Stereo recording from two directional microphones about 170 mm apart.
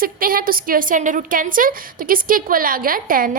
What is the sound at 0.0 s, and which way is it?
A woman's voice, 55° right (ahead or behind).